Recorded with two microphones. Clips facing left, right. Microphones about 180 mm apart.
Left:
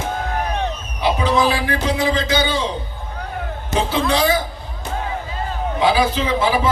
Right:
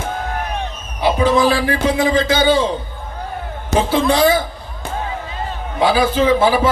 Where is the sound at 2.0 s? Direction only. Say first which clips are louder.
Right 3 dB; 50° right (ahead or behind).